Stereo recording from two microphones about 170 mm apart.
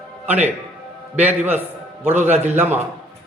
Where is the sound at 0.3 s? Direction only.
10° right (ahead or behind).